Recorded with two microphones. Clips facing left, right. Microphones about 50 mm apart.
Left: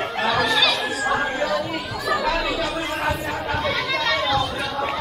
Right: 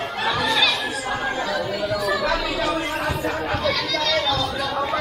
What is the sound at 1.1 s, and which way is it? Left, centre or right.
Chatter, centre.